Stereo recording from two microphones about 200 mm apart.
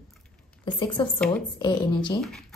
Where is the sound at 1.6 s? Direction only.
25° left (ahead or behind).